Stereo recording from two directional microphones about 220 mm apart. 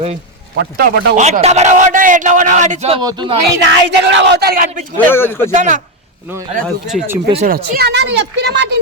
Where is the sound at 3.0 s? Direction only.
20° right (ahead or behind).